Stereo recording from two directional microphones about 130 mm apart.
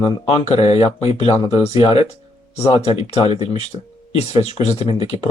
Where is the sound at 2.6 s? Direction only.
50° left (ahead or behind).